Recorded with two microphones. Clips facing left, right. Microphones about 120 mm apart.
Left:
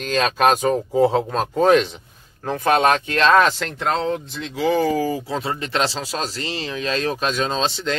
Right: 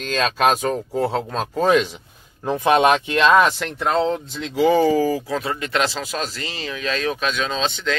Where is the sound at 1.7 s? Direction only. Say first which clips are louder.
Left 1 dB; 10° right (ahead or behind).